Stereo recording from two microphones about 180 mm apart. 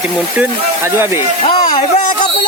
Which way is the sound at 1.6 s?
45° left (ahead or behind).